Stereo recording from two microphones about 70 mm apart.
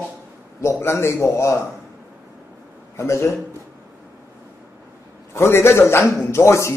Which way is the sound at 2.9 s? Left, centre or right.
Left.